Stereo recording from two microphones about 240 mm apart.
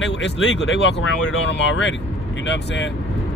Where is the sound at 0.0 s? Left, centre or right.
Left.